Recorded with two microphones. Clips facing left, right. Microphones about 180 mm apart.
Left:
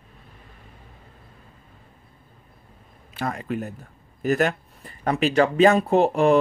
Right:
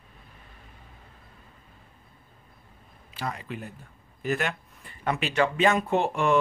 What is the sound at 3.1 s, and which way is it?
A man's voice, 50° left (ahead or behind).